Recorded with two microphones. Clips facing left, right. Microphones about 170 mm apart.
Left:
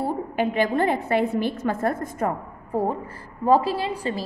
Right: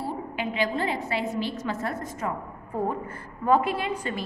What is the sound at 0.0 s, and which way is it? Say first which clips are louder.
A woman's voice: left 7 dB; 55° left (ahead or behind).